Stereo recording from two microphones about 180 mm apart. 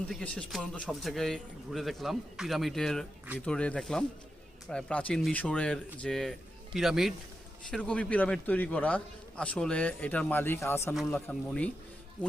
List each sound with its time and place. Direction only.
0.1 s a man's voice: 5° left (ahead or behind)
10.9 s a man's voice: 5° left (ahead or behind)